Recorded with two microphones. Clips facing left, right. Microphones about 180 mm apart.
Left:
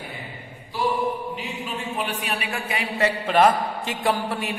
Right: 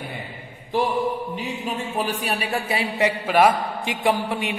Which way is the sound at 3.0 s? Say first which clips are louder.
Even; 5° right (ahead or behind).